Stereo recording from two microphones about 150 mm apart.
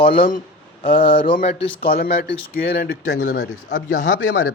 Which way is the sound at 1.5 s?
75° left (ahead or behind).